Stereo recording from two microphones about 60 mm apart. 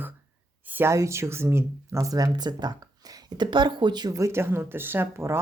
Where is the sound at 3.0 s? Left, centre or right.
Right.